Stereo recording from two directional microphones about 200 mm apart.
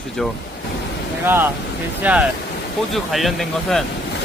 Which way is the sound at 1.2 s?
10° right (ahead or behind).